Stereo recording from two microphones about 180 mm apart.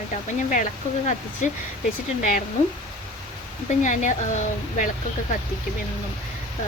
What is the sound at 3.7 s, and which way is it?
Speech, 45° left (ahead or behind).